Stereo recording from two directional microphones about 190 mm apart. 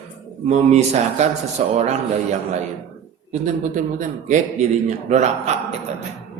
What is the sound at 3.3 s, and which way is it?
A man's voice, 40° right (ahead or behind).